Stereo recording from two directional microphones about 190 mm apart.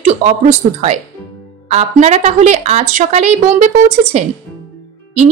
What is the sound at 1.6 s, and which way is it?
A woman's voice, 35° right (ahead or behind).